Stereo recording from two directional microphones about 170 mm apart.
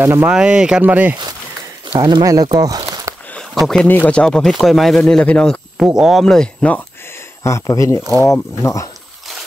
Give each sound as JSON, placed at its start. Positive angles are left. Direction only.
{"t": 0.0, "sound": "speech", "side_deg": -15}
{"t": 2.0, "sound": "speech", "side_deg": -25}
{"t": 3.3, "sound": "speech", "side_deg": 0}
{"t": 7.4, "sound": "speech", "side_deg": 20}